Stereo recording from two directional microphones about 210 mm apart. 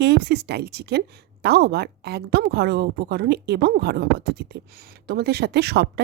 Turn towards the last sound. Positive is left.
turn(degrees=-50)  # may be behind; listen again after turning